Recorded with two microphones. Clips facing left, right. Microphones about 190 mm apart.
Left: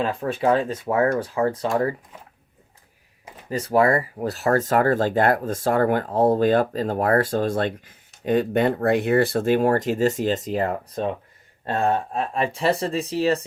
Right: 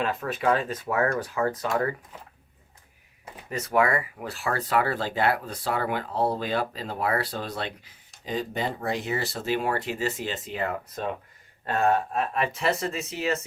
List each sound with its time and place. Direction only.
0.0 s speech: 30° left (ahead or behind)
3.5 s speech: 30° left (ahead or behind); by 7.9 s 50° left (ahead or behind)
8.2 s speech: 60° left (ahead or behind); by 13.4 s 35° left (ahead or behind)